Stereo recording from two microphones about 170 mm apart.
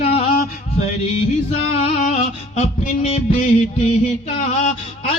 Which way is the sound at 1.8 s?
45° left (ahead or behind).